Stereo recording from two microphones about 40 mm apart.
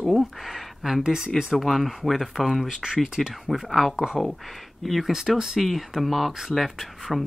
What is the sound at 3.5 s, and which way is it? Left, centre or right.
Speech, centre.